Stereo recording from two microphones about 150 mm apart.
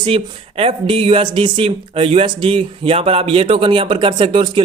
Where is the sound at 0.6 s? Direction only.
40° right (ahead or behind).